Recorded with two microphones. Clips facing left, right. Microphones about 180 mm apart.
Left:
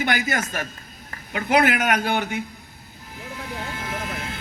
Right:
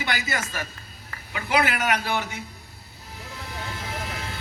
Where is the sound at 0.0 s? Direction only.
50° left (ahead or behind).